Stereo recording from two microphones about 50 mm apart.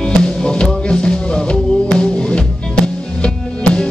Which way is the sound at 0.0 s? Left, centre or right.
Centre.